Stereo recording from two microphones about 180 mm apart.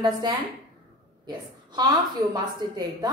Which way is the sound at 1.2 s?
25° right (ahead or behind).